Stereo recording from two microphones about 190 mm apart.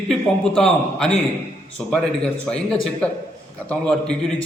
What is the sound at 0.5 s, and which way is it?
A man's voice, 5° left (ahead or behind).